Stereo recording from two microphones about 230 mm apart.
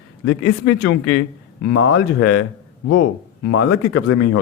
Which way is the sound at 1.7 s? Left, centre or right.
Left.